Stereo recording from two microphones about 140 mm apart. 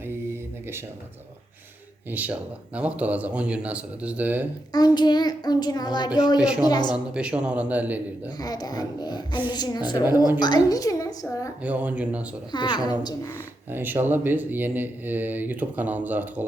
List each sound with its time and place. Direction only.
2.0 s speech: 10° right (ahead or behind)
4.7 s a child's voice: 30° left (ahead or behind)
6.4 s speech: 5° right (ahead or behind)
6.7 s a child's voice: 30° left (ahead or behind)
6.9 s speech: 5° right (ahead or behind)
8.4 s a child's voice: 25° left (ahead or behind)
11.6 s speech: 10° right (ahead or behind)
12.5 s a woman's voice: 30° left (ahead or behind)
13.7 s speech: 15° right (ahead or behind)